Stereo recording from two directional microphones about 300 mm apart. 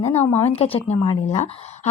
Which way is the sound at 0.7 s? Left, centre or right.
Centre.